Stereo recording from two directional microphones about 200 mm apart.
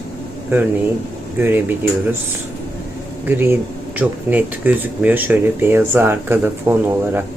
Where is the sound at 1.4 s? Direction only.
10° right (ahead or behind).